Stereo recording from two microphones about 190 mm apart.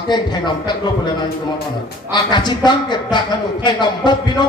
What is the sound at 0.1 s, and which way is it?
A man's voice, 25° left (ahead or behind).